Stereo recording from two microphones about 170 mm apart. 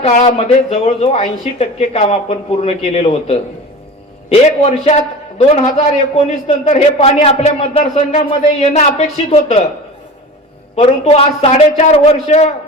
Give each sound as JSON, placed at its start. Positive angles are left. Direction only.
{"t": 0.0, "sound": "speech", "side_deg": 45}
{"t": 11.0, "sound": "speech", "side_deg": 35}